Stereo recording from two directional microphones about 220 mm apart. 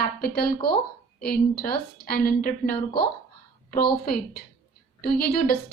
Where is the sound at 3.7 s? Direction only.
45° left (ahead or behind).